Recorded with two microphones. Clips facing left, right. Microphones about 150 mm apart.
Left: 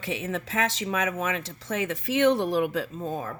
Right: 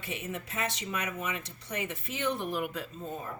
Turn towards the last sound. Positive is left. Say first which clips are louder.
# left 7 dB
turn(degrees=90)